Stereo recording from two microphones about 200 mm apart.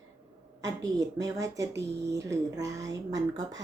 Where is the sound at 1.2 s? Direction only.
15° right (ahead or behind).